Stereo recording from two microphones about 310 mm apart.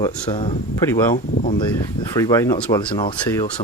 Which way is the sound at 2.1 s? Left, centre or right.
Centre.